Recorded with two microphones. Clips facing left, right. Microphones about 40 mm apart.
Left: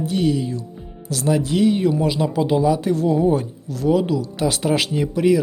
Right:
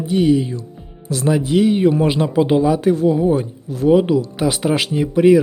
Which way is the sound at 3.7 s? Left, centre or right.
Right.